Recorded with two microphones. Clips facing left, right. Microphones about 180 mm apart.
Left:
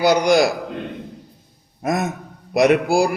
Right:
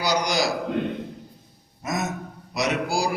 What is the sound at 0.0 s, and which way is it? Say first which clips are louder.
Speech: left 9 dB; 55° left (ahead or behind).